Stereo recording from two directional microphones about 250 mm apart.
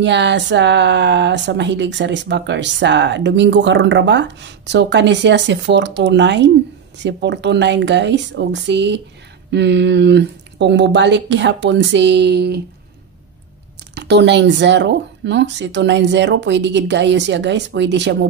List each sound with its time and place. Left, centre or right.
0.0 s speech: right
13.9 s speech: right